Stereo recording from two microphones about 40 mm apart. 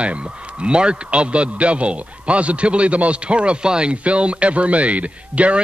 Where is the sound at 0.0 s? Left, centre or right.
Right.